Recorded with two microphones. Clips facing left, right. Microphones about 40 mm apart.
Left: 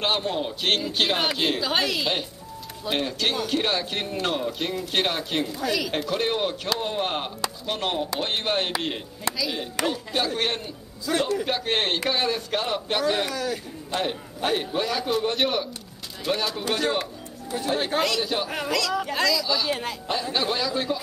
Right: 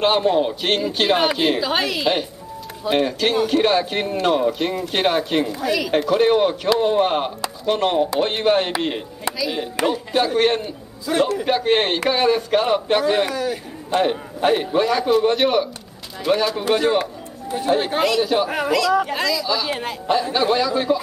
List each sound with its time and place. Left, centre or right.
0.3 s a man's voice: right
5.9 s a man's voice: right
11.1 s a man's voice: right
11.4 s a man's voice: centre
19.7 s a man's voice: right
20.1 s speech: centre